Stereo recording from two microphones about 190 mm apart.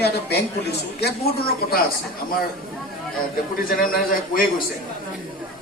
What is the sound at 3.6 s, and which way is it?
Speech, 50° left (ahead or behind).